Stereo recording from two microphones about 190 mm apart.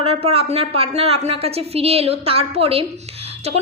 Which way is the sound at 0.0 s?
30° right (ahead or behind).